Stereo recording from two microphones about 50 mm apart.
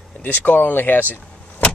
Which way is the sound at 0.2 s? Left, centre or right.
Left.